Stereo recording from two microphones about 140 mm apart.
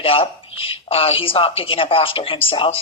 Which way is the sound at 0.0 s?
40° left (ahead or behind).